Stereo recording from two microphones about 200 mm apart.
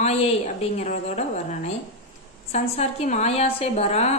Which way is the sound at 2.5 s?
35° left (ahead or behind).